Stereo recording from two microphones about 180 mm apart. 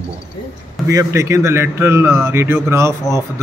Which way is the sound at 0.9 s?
15° right (ahead or behind).